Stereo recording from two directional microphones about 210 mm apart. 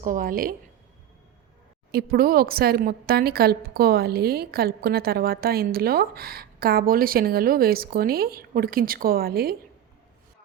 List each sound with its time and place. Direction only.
0.0 s a woman's voice: 40° right (ahead or behind)
1.9 s speech: 45° right (ahead or behind)